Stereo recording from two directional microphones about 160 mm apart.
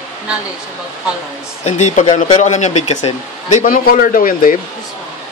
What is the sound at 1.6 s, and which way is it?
Speech, 50° left (ahead or behind).